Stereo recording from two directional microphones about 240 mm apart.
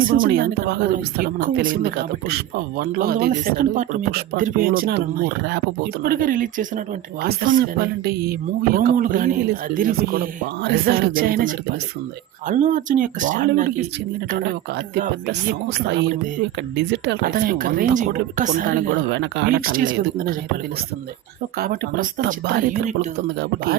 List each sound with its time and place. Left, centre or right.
0.0 s speech: right
14.9 s speech: right
19.1 s speech: right
21.6 s speech: right